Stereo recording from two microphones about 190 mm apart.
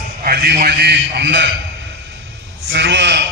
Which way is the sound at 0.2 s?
55° right (ahead or behind).